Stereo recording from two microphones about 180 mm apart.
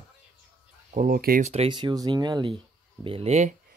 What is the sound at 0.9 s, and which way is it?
Speech, 50° right (ahead or behind).